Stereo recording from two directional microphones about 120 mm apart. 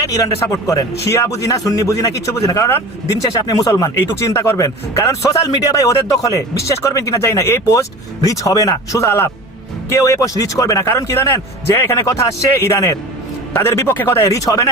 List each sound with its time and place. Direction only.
0.0 s speech: 30° left (ahead or behind)